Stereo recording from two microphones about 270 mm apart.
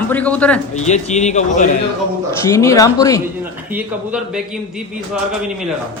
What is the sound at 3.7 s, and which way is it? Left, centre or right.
Speech, centre.